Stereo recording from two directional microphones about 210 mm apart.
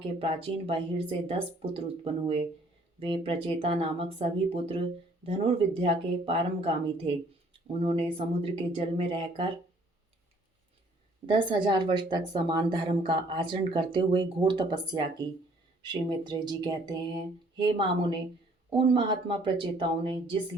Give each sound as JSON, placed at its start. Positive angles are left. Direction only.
{"t": 0.0, "sound": "speech", "side_deg": -25}
{"t": 11.3, "sound": "speech", "side_deg": -20}